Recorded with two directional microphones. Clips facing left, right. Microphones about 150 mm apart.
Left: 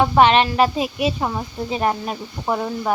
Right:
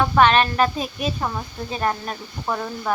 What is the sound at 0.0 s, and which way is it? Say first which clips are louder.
Speech: left 2 dB; 20° left (ahead or behind).